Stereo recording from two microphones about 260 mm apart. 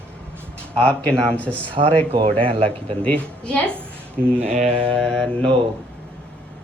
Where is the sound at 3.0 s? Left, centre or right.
Centre.